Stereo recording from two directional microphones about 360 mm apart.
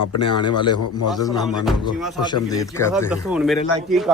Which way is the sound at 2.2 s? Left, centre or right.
Centre.